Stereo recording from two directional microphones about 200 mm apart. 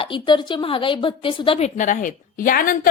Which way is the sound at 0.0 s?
25° left (ahead or behind).